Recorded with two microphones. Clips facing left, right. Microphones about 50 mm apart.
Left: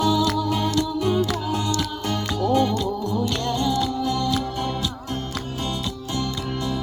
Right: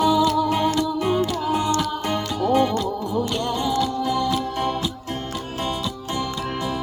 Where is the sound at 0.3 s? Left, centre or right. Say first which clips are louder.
Right 3 dB; centre.